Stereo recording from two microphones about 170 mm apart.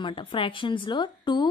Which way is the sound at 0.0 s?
30° left (ahead or behind).